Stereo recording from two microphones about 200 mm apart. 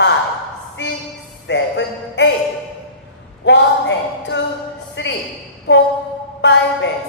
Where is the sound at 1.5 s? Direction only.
60° left (ahead or behind).